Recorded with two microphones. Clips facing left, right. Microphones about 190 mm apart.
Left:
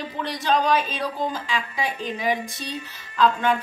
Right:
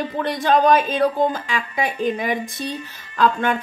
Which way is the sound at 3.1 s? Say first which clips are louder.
Right 1 dB; 50° right (ahead or behind).